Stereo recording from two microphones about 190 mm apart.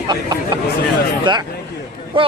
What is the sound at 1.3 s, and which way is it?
A man's voice, 25° right (ahead or behind).